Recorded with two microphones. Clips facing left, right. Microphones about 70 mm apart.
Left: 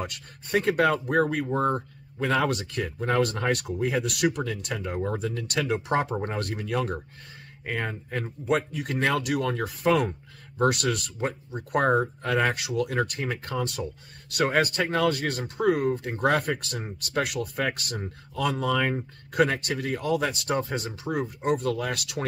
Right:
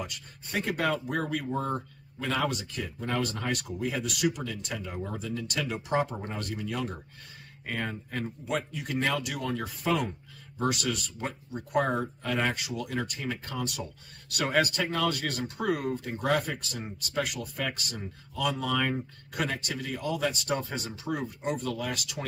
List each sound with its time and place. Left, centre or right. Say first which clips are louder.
0.0 s speech: left 4 dB; left
7.6 s speech: left 3 dB; left
8.2 s speech: left 6 dB; left
11.1 s speech: left 5 dB; left
11.7 s speech: left 5 dB; left
15.9 s speech: left 4 dB; left
17.9 s speech: left 4 dB; left
19.3 s speech: left 8 dB; left
20.4 s speech: left 4 dB; left